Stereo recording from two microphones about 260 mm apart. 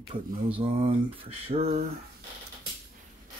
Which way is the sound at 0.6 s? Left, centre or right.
Right.